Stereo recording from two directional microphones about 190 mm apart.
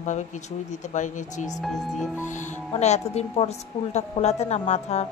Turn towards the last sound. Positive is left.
turn(degrees=35)  # may be behind; listen again after turning